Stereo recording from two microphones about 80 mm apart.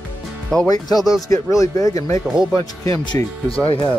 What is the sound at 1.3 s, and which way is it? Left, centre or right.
Speech, left.